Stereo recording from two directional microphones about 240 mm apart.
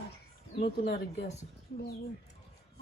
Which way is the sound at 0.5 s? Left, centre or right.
Left.